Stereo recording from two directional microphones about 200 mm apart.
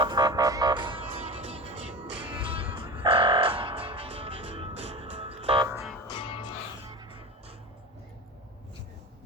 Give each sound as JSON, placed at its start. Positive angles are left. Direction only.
{"t": 0.0, "sound": "music", "side_deg": -20}
{"t": 6.1, "sound": "music", "side_deg": 25}